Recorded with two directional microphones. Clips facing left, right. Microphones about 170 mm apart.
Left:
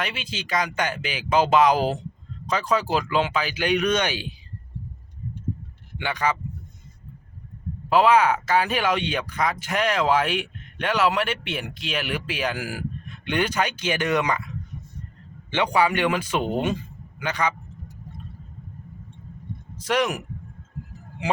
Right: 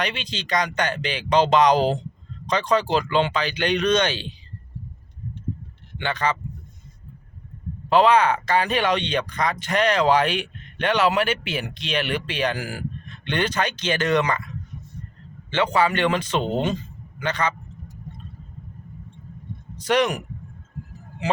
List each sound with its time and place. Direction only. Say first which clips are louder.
0.0 s speech: right 3 dB; 5° left (ahead or behind)
6.0 s speech: right 1 dB; 10° left (ahead or behind)
7.9 s speech: right 1 dB; 5° left (ahead or behind)
15.4 s a man's voice: right 1 dB; 15° left (ahead or behind)
19.7 s speech: right 3 dB; centre (ahead or behind)
21.2 s a man's voice: right 1 dB; 15° left (ahead or behind)